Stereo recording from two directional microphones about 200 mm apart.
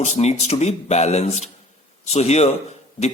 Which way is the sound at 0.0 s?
35° left (ahead or behind).